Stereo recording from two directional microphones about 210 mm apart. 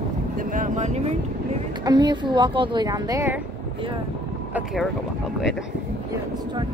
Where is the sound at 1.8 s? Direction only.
20° right (ahead or behind).